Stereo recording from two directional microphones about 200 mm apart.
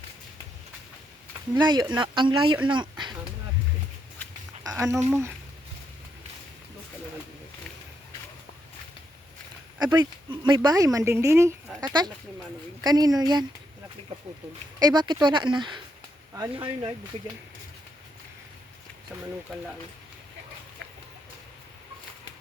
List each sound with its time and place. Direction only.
1.5 s speech: 20° right (ahead or behind)
3.0 s a sound: 25° right (ahead or behind)
4.8 s speech: 15° right (ahead or behind)
9.8 s speech: 20° right (ahead or behind)
14.8 s speech: 20° right (ahead or behind)